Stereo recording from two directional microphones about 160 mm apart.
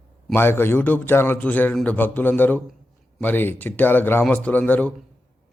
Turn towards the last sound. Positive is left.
turn(degrees=10)  # may be behind; listen again after turning